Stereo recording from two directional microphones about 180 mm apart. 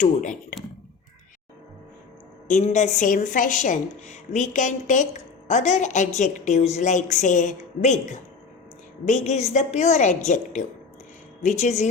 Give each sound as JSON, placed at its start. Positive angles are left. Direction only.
{"t": 0.0, "sound": "a woman's voice", "side_deg": 45}
{"t": 2.5, "sound": "a woman's voice", "side_deg": 40}